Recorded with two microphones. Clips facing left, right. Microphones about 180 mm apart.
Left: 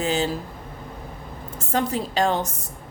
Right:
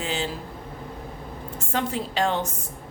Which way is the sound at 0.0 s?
40° left (ahead or behind).